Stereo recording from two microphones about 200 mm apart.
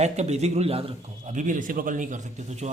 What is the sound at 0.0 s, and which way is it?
A man's voice, 35° right (ahead or behind).